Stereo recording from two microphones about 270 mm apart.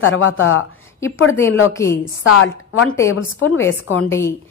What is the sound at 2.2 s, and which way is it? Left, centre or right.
Speech, left.